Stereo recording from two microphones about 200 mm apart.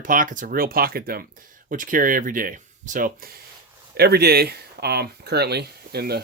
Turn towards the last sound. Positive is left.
turn(degrees=-50)  # may be behind; listen again after turning